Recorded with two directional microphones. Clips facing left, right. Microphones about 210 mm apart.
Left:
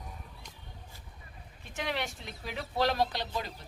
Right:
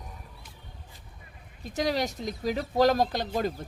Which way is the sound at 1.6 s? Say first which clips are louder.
Right 8 dB; 40° right (ahead or behind).